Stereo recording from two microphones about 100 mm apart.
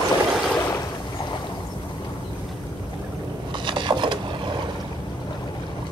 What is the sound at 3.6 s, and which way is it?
Wood, 55° right (ahead or behind).